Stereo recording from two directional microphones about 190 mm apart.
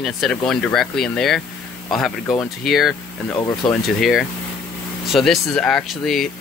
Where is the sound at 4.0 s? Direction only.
Centre (ahead or behind).